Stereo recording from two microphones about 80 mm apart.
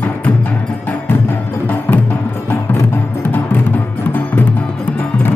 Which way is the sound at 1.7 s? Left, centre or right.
Left.